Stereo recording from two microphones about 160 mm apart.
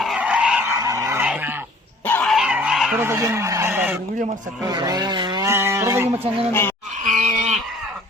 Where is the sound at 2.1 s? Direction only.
10° left (ahead or behind).